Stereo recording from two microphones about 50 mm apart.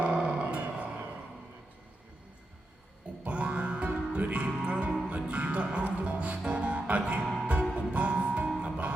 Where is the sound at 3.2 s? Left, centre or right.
Right.